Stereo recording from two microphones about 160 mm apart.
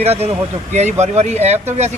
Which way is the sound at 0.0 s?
40° right (ahead or behind).